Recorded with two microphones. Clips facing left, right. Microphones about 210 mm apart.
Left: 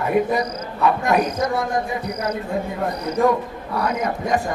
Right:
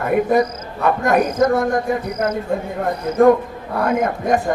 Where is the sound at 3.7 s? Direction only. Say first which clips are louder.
Right 4 dB; 50° right (ahead or behind).